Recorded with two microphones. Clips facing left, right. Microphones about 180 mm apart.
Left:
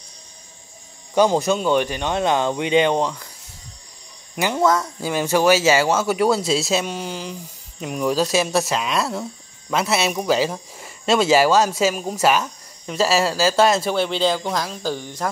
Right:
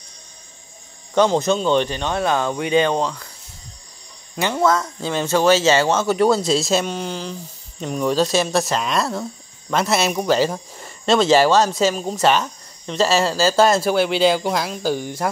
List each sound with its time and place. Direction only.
1.1 s speech: 10° left (ahead or behind)
4.4 s speech: 15° left (ahead or behind); by 15.2 s 10° right (ahead or behind)